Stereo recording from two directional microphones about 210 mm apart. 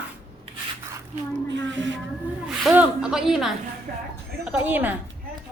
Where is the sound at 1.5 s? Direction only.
60° right (ahead or behind).